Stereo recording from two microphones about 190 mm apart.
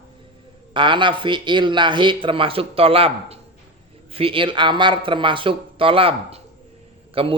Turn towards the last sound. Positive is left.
turn(degrees=-30)  # may be behind; listen again after turning